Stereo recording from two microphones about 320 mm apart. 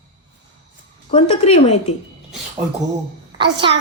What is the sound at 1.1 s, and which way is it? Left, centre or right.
Speech, left.